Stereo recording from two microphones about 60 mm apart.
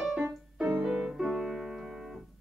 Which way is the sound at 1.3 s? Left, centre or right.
Centre.